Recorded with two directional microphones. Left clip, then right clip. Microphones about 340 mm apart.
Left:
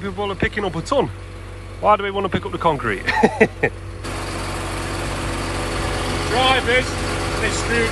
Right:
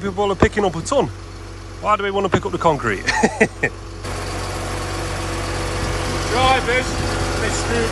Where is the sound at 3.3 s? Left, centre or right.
Centre.